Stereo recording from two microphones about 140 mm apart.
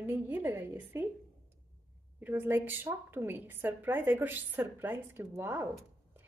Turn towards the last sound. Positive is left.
turn(degrees=-20)  # may be behind; listen again after turning